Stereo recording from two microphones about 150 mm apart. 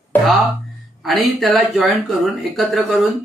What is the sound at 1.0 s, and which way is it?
Speech, centre (ahead or behind).